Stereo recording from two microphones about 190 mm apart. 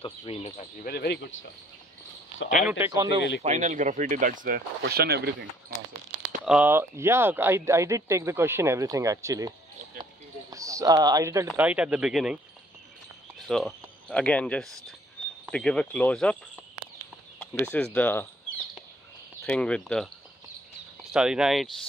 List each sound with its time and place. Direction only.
0.0 s speech: 30° left (ahead or behind)
0.8 s speech: 60° left (ahead or behind)
2.5 s speech: 5° right (ahead or behind)
2.9 s speech: 20° right (ahead or behind)
3.2 s speech: 65° left (ahead or behind)
3.4 s speech: 40° right (ahead or behind); by 5.5 s 55° right (ahead or behind)
6.4 s speech: 5° right (ahead or behind)
10.5 s speech: 15° right (ahead or behind)
11.4 s speech: 5° right (ahead or behind)
13.4 s speech: centre (ahead or behind)
17.4 s speech: 5° left (ahead or behind)
19.4 s speech: 5° left (ahead or behind)
21.1 s speech: 5° right (ahead or behind)